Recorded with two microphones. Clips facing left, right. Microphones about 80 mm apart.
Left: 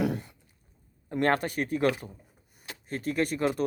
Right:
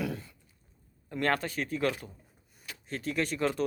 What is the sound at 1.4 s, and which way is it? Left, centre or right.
Speech, left.